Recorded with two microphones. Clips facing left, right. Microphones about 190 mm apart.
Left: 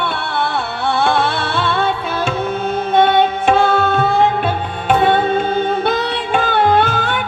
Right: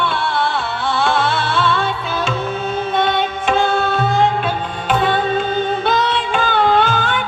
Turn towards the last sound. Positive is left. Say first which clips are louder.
# left 1 dB
turn(degrees=60)  # may be behind; listen again after turning